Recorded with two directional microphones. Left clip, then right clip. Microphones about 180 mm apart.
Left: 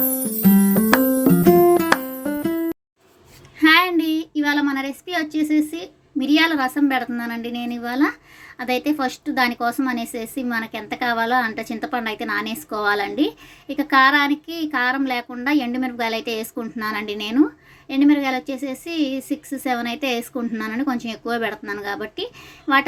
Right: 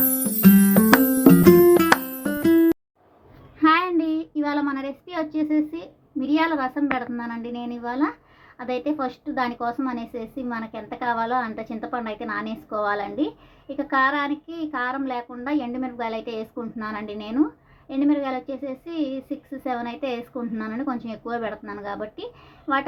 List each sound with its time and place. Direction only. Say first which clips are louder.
0.0 s music: right 1 dB; centre (ahead or behind)
3.6 s child singing: left 4 dB; 20° left (ahead or behind)
8.5 s speech: left 4 dB; 20° left (ahead or behind)